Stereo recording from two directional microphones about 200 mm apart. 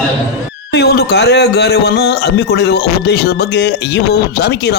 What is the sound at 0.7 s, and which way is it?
A man's voice, 55° left (ahead or behind).